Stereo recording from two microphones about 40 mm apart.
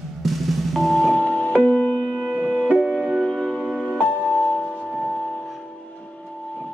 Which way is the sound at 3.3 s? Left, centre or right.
Centre.